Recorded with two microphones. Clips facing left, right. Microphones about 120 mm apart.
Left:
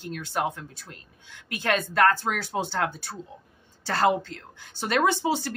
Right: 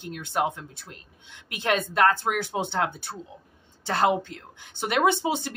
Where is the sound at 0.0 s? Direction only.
15° right (ahead or behind).